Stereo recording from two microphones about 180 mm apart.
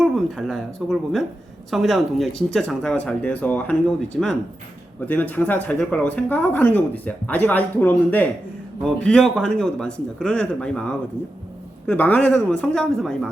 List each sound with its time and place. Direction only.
0.0 s speech: centre (ahead or behind)